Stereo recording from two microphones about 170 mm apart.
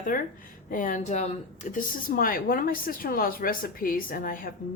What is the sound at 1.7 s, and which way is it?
A woman's voice, 55° left (ahead or behind).